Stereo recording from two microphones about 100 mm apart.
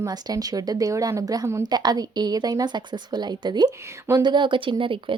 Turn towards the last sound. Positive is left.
turn(degrees=-60)  # may be behind; listen again after turning